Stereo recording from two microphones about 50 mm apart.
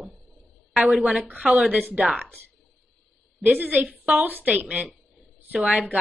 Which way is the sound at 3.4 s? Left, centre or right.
Right.